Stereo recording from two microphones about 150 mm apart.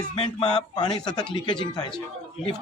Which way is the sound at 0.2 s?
30° left (ahead or behind).